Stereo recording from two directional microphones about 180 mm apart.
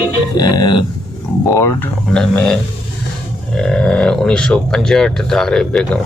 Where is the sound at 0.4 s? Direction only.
20° left (ahead or behind).